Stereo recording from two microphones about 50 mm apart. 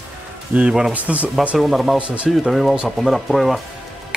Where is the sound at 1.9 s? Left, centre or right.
Right.